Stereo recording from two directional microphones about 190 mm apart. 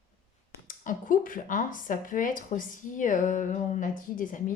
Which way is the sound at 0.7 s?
45° left (ahead or behind).